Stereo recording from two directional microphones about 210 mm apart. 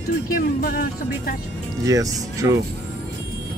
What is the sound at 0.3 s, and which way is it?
Speech, 45° left (ahead or behind).